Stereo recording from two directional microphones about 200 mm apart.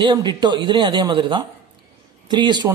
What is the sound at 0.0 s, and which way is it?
A man's voice, 25° right (ahead or behind).